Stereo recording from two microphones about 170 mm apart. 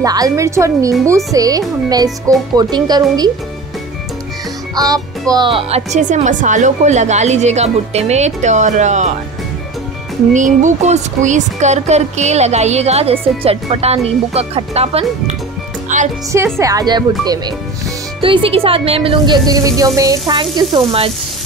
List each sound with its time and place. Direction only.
0.0 s a woman's voice: 20° right (ahead or behind)
4.7 s a woman's voice: 20° right (ahead or behind); by 9.1 s 45° right (ahead or behind)
10.3 s speech: 45° right (ahead or behind)
15.9 s speech: 45° right (ahead or behind)
16.5 s a woman's voice: 20° right (ahead or behind)